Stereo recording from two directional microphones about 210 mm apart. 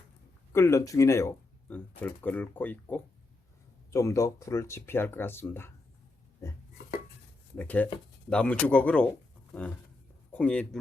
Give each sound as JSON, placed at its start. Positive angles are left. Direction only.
{"t": 0.5, "sound": "speech", "side_deg": 15}
{"t": 7.5, "sound": "speech", "side_deg": 10}
{"t": 10.3, "sound": "speech", "side_deg": 5}